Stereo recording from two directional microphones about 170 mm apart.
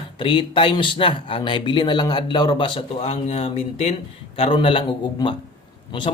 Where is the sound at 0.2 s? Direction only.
30° left (ahead or behind).